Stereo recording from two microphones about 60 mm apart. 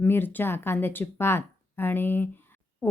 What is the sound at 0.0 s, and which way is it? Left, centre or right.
Speech, left.